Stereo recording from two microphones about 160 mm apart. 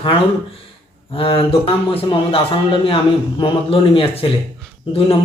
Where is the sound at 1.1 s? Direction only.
35° left (ahead or behind).